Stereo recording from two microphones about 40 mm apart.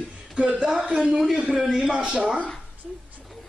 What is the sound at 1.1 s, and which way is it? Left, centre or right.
A woman's voice, centre.